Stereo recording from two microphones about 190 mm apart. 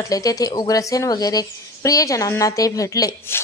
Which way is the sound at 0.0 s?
20° left (ahead or behind).